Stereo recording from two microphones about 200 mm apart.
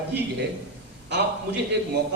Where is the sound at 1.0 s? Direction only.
60° right (ahead or behind).